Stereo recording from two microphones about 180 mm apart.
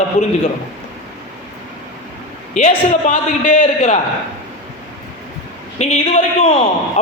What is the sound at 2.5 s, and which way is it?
A man's voice, 45° left (ahead or behind).